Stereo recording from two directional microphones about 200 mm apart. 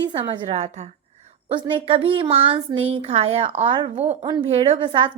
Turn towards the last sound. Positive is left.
turn(degrees=-25)  # may be behind; listen again after turning